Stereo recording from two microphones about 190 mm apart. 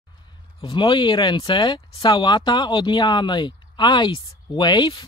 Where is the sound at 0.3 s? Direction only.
25° left (ahead or behind).